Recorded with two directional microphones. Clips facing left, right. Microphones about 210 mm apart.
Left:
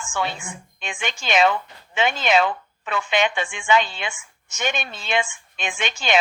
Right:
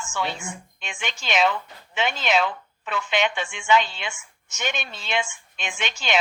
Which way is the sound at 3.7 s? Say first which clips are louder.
Even; 50° left (ahead or behind).